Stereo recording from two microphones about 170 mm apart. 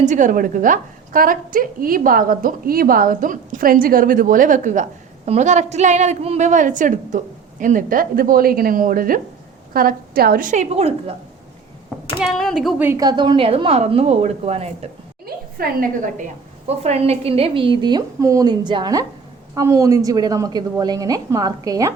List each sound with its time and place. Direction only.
0.0 s a woman's voice: 45° right (ahead or behind)
12.2 s speech: centre (ahead or behind)
12.8 s a woman's voice: 20° right (ahead or behind); by 14.8 s 35° right (ahead or behind)
15.5 s a woman's voice: 60° right (ahead or behind); by 21.9 s 20° right (ahead or behind)